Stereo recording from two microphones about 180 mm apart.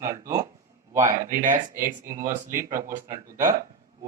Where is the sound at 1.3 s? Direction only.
50° right (ahead or behind).